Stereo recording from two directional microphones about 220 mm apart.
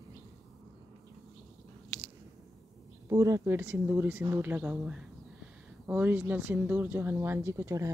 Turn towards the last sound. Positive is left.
turn(degrees=-15)  # may be behind; listen again after turning